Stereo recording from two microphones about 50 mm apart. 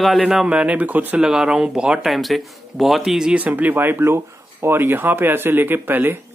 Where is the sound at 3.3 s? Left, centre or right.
Right.